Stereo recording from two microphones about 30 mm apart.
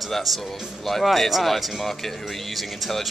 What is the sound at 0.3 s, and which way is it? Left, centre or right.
A woman's voice, centre.